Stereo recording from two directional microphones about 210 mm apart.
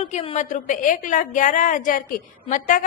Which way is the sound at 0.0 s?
30° left (ahead or behind).